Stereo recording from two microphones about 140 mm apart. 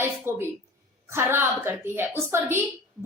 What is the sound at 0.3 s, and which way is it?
A woman's voice, 15° right (ahead or behind).